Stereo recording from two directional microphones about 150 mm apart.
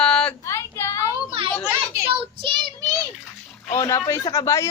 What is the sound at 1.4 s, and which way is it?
Children playing, 40° right (ahead or behind).